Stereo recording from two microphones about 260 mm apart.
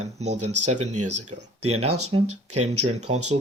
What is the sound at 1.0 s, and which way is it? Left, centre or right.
Speech, right.